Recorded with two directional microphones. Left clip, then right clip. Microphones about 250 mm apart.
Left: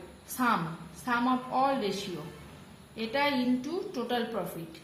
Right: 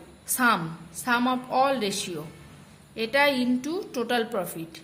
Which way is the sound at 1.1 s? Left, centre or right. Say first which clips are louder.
Right 4 dB; right.